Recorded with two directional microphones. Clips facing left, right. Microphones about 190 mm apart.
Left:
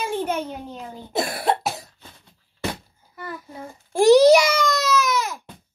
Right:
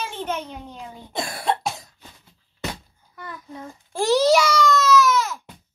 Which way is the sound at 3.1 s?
5° left (ahead or behind).